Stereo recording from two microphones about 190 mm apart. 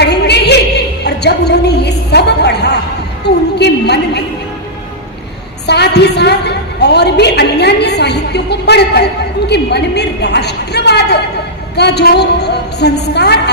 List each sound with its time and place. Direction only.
0.0 s a sound: 60° left (ahead or behind)
3.2 s a woman's voice: 60° left (ahead or behind)
5.6 s a woman's voice: 60° left (ahead or behind)